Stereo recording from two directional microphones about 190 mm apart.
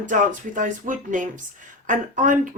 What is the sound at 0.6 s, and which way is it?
Speech, 45° right (ahead or behind).